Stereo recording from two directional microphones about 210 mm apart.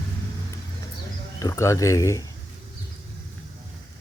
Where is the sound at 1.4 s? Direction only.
15° left (ahead or behind).